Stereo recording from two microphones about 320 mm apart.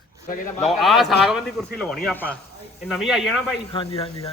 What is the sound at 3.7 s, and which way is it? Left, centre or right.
Speech, centre.